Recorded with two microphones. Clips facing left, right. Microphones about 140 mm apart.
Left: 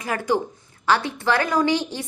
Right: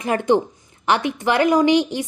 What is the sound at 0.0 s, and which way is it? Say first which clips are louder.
A woman's voice: right 5 dB; 25° right (ahead or behind).